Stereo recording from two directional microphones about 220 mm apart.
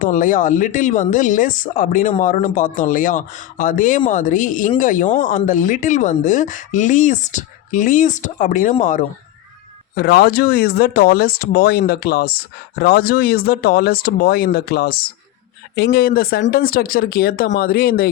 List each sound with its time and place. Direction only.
0.0 s speech: 35° left (ahead or behind)